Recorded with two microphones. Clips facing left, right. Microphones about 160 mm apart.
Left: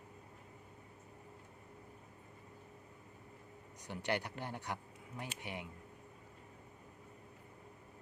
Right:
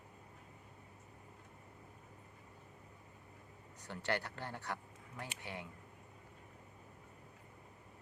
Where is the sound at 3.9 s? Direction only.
15° left (ahead or behind).